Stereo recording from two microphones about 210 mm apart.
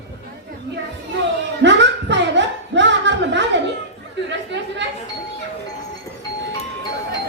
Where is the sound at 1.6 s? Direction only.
55° right (ahead or behind).